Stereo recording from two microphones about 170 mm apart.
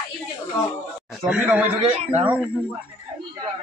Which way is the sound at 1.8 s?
35° right (ahead or behind).